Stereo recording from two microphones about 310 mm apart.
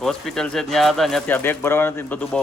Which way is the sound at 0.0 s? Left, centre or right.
Centre.